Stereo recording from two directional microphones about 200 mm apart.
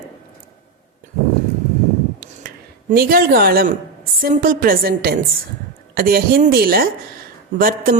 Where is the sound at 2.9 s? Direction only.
50° right (ahead or behind).